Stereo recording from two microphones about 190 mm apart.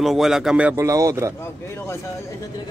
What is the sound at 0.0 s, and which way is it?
Speech, centre (ahead or behind).